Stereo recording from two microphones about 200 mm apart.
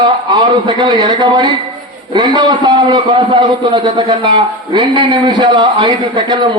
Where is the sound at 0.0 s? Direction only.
20° right (ahead or behind).